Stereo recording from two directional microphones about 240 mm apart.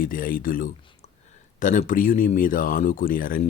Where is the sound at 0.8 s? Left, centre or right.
Left.